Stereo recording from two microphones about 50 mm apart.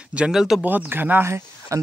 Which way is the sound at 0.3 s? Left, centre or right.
Centre.